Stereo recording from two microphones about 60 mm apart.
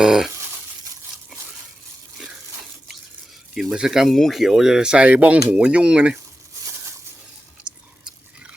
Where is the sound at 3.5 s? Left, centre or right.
Centre.